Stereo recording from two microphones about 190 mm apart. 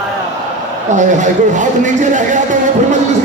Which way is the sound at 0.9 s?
40° right (ahead or behind).